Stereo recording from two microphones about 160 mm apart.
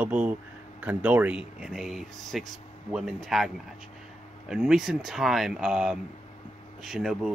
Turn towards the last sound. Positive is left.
turn(degrees=0)  # may be behind; listen again after turning